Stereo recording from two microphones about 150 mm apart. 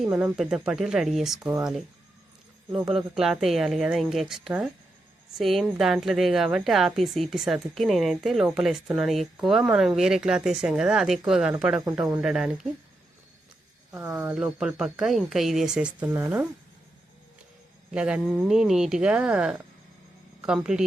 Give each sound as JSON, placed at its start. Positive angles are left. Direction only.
{"t": 0.0, "sound": "a woman's voice", "side_deg": -5}
{"t": 13.9, "sound": "a woman's voice", "side_deg": -10}
{"t": 17.9, "sound": "a woman's voice", "side_deg": -5}